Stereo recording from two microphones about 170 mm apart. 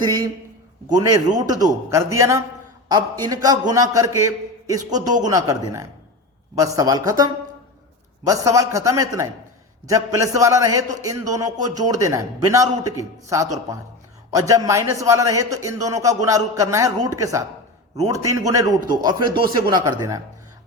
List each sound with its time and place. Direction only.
0.0 s a man's voice: 25° right (ahead or behind)